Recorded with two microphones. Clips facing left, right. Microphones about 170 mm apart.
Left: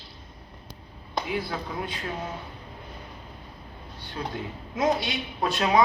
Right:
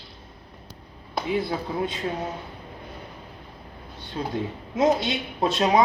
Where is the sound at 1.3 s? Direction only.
25° right (ahead or behind).